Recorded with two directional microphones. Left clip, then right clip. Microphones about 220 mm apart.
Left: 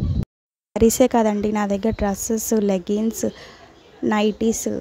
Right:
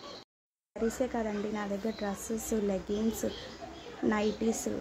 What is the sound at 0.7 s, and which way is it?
A woman's voice, 50° left (ahead or behind).